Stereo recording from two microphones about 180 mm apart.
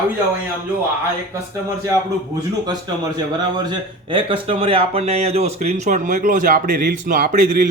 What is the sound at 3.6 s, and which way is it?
A man's voice, 25° right (ahead or behind).